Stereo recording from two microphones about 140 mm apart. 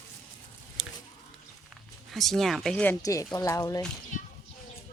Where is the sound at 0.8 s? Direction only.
Centre (ahead or behind).